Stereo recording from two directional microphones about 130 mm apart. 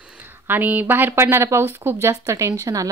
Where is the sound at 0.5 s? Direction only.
15° right (ahead or behind).